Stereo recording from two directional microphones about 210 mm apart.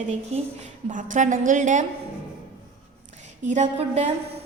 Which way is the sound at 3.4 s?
35° right (ahead or behind).